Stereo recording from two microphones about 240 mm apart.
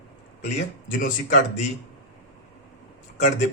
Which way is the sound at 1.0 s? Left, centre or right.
Left.